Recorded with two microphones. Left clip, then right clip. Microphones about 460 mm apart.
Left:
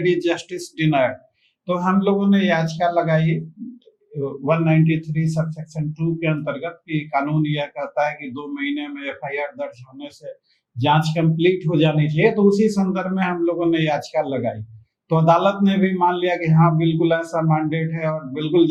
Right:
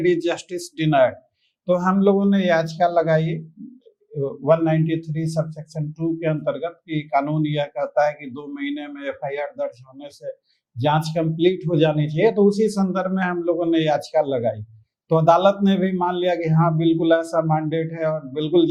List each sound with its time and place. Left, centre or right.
0.0 s speech: right